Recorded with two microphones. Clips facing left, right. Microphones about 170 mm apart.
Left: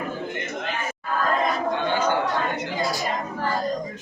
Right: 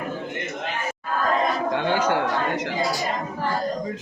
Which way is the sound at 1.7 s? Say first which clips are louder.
Right 1 dB; 90° right.